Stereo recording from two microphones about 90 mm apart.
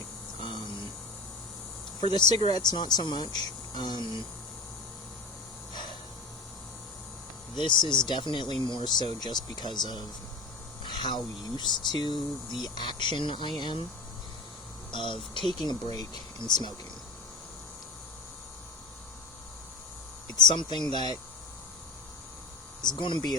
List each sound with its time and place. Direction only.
0.3 s a sound: 65° left (ahead or behind)
2.0 s speech: 60° left (ahead or behind)
7.5 s speech: 60° left (ahead or behind)
10.8 s speech: 60° left (ahead or behind)
14.9 s speech: 65° left (ahead or behind)
15.6 s speech: 50° left (ahead or behind)
20.3 s speech: 55° left (ahead or behind)
22.8 s speech: 55° left (ahead or behind)